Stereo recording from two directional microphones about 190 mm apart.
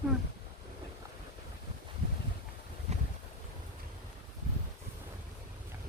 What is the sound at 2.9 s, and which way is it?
Boat, 35° right (ahead or behind).